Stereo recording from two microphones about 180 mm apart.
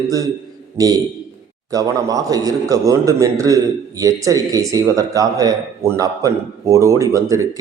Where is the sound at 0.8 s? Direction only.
20° right (ahead or behind).